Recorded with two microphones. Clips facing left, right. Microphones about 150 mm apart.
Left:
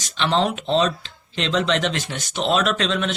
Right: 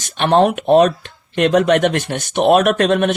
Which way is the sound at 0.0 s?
55° right (ahead or behind).